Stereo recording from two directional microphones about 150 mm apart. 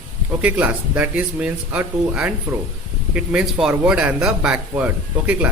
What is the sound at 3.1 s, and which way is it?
Speech, 5° right (ahead or behind).